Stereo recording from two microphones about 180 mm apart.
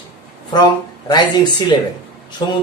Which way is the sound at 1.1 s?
25° left (ahead or behind).